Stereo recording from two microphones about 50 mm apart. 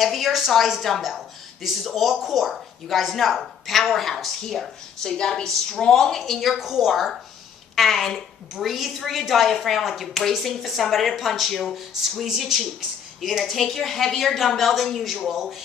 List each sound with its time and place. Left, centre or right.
0.0 s a woman's voice: centre
6.6 s a woman's voice: centre